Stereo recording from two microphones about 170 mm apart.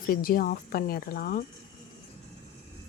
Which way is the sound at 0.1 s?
60° left (ahead or behind).